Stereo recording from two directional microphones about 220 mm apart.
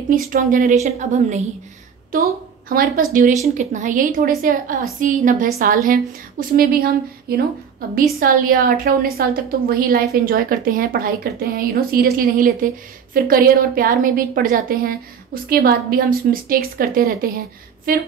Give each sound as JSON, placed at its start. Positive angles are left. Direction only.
{"t": 0.1, "sound": "a woman's voice", "side_deg": -40}
{"t": 2.1, "sound": "a woman's voice", "side_deg": -40}